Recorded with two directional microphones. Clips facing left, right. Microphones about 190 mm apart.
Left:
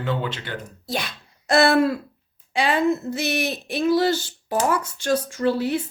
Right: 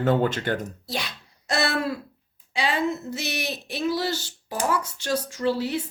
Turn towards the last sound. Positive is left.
turn(degrees=55)  # may be behind; listen again after turning